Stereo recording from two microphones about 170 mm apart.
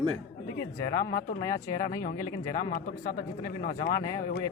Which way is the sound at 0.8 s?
55° left (ahead or behind).